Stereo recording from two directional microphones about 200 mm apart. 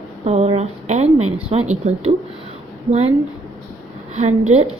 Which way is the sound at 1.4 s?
30° right (ahead or behind).